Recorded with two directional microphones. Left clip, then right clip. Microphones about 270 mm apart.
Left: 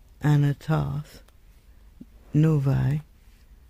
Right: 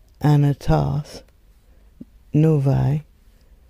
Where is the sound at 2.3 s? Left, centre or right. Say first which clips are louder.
Right 6 dB; centre.